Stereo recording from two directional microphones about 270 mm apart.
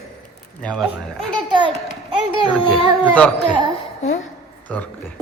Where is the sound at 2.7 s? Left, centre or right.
Centre.